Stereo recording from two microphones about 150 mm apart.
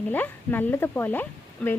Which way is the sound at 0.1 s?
10° left (ahead or behind).